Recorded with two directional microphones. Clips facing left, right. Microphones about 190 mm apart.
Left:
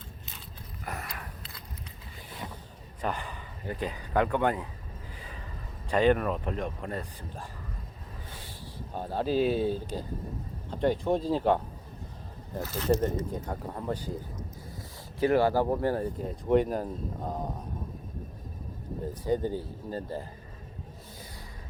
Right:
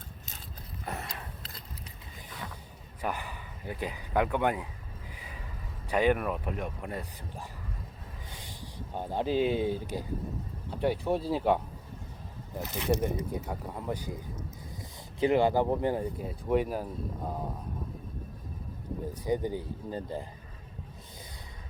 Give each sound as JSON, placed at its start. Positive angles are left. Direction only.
{"t": 0.9, "sound": "mechanisms", "side_deg": -25}
{"t": 3.0, "sound": "speech", "side_deg": -10}
{"t": 5.1, "sound": "a sound", "side_deg": -10}
{"t": 5.9, "sound": "speech", "side_deg": -10}
{"t": 8.3, "sound": "speech", "side_deg": -15}
{"t": 12.6, "sound": "speech", "side_deg": -15}
{"t": 19.2, "sound": "speech", "side_deg": -15}